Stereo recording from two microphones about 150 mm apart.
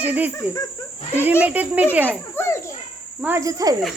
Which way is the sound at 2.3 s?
15° left (ahead or behind).